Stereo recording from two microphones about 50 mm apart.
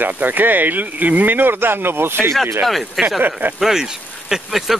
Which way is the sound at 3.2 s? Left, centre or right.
Right.